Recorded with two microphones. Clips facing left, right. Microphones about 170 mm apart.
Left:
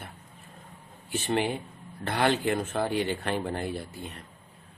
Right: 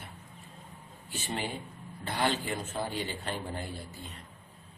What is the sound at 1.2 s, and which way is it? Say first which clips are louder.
Speech: left 8 dB; 65° left (ahead or behind).